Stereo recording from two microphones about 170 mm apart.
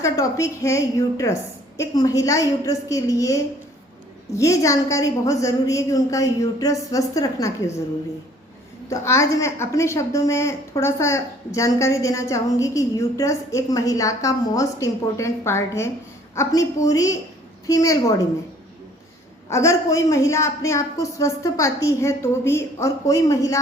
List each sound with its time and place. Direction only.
0.0 s a woman's voice: 20° left (ahead or behind)
8.9 s a woman's voice: 20° left (ahead or behind)
19.5 s a man's voice: 15° left (ahead or behind)